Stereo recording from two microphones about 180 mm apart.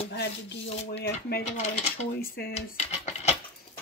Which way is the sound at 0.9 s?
60° left (ahead or behind).